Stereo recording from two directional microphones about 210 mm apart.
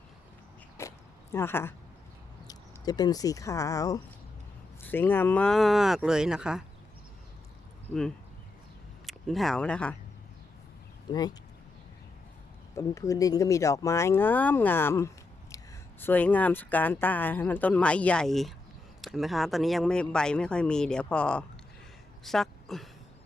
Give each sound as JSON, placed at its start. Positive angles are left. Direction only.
{"t": 0.8, "sound": "a sound", "side_deg": 15}
{"t": 2.5, "sound": "speech", "side_deg": 20}
{"t": 9.0, "sound": "speech", "side_deg": 0}
{"t": 11.1, "sound": "speech", "side_deg": 20}
{"t": 12.7, "sound": "speech", "side_deg": 15}
{"t": 22.2, "sound": "a sound", "side_deg": 0}